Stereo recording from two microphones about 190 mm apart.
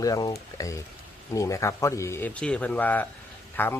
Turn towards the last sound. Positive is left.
turn(degrees=10)  # may be behind; listen again after turning